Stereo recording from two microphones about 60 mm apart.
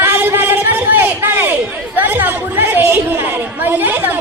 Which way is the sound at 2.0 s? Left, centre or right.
Right.